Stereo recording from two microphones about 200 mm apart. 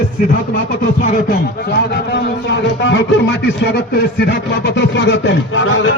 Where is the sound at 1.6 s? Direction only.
55° left (ahead or behind); by 5.8 s 75° left (ahead or behind).